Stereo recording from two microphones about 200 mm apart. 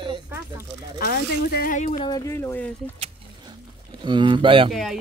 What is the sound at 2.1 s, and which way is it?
Speech, 20° left (ahead or behind).